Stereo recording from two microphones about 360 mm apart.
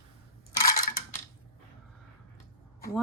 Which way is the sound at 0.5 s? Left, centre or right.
Left.